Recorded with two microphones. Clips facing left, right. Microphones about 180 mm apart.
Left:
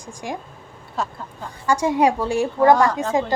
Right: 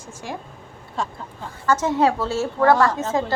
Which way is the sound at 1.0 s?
Centre (ahead or behind).